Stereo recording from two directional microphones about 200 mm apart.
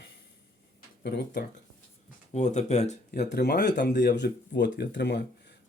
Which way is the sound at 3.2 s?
55° left (ahead or behind).